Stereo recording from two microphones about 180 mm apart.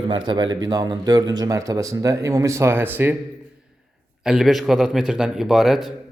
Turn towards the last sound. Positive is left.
turn(degrees=0)  # may be behind; listen again after turning